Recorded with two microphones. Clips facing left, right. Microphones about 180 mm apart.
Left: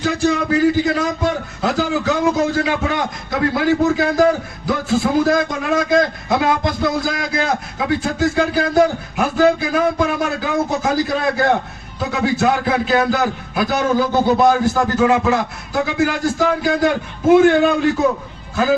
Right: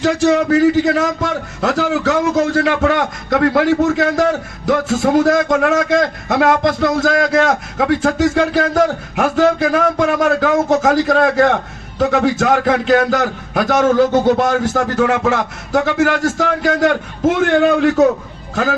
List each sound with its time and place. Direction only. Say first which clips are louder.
0.0 s a man's voice: right 4 dB; 75° right (ahead or behind)